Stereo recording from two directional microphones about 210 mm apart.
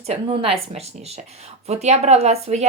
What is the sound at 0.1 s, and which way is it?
Speech, 25° right (ahead or behind).